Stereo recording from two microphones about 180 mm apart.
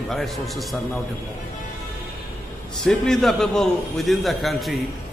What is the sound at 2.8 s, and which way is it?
A man's voice, centre (ahead or behind).